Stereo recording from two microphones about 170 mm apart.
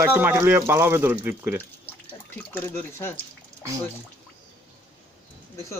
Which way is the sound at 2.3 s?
10° left (ahead or behind).